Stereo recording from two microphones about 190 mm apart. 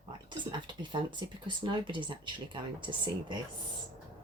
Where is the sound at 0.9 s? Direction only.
25° right (ahead or behind).